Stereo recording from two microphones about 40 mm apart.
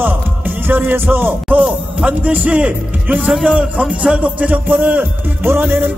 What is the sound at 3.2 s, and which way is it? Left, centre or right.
Speech, centre.